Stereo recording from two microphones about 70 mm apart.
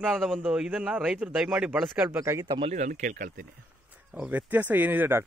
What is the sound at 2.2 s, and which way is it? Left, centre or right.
Speech, right.